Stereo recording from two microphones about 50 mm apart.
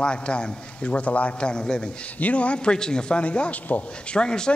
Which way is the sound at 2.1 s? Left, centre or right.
Left.